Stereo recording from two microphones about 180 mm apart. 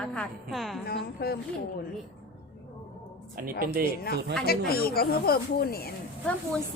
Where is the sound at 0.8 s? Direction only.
60° left (ahead or behind).